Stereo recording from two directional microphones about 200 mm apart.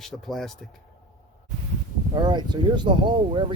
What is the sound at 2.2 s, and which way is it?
Speech, 20° right (ahead or behind).